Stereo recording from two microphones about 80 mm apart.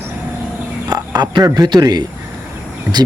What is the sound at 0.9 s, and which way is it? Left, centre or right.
Speech, right.